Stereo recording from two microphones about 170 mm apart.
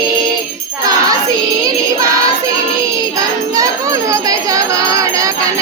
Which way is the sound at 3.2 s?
20° right (ahead or behind).